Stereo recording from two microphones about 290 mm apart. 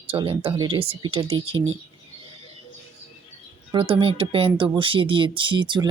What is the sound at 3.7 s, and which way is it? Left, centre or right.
Speech, centre.